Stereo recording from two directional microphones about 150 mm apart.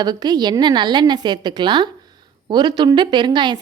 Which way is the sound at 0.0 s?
25° right (ahead or behind).